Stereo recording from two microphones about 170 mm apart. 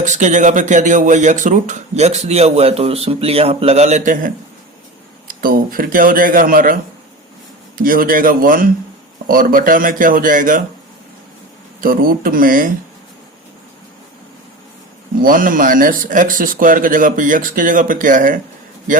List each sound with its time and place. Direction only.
0.0 s speech: 45° right (ahead or behind)
5.3 s speech: 55° right (ahead or behind)
7.8 s speech: 55° right (ahead or behind)
11.8 s speech: 55° right (ahead or behind)
15.2 s speech: 55° right (ahead or behind)